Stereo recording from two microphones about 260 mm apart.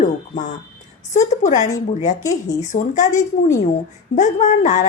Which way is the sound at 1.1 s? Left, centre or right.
Left.